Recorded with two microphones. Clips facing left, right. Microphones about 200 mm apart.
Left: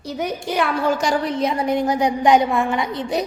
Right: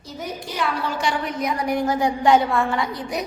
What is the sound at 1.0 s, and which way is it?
Speech, 40° left (ahead or behind).